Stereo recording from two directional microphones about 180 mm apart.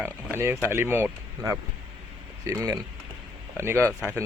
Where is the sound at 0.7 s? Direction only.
15° right (ahead or behind).